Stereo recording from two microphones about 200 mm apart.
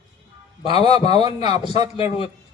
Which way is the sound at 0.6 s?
25° left (ahead or behind).